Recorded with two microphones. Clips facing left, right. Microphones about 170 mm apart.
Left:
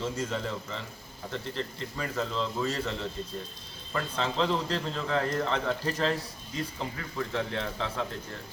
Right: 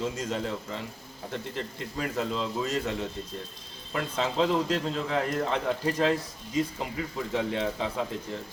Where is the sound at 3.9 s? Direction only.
15° right (ahead or behind).